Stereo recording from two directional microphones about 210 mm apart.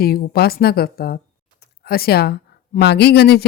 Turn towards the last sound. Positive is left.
turn(degrees=50)  # may be behind; listen again after turning